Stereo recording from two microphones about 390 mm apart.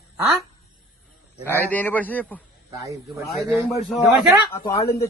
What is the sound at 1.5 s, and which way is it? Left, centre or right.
A man's voice, centre.